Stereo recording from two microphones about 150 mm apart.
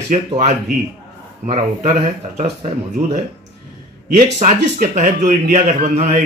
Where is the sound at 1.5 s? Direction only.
50° right (ahead or behind).